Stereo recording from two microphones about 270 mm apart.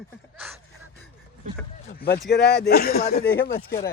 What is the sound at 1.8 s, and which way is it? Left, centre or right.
Speech, left.